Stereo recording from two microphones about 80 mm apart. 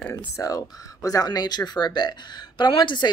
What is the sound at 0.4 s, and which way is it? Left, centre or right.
Speech, left.